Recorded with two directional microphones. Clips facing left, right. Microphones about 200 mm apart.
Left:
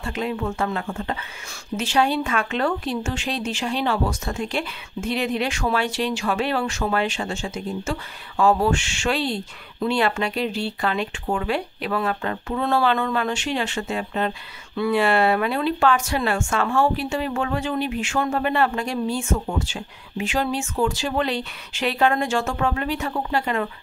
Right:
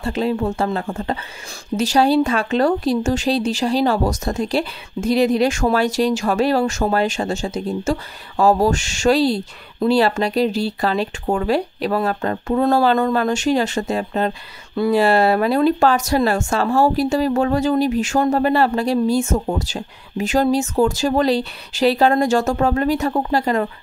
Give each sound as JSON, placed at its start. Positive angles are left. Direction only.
{"t": 0.0, "sound": "speech", "side_deg": -35}